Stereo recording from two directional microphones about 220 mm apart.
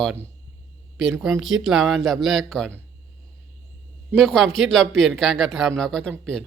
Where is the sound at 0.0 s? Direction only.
5° right (ahead or behind).